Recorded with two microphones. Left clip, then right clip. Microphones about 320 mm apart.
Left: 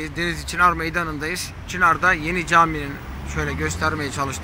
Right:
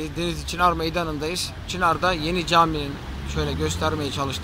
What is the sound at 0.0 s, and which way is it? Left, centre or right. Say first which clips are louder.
Speech: left 3 dB; centre.